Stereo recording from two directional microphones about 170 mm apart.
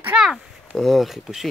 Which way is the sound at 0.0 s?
5° right (ahead or behind).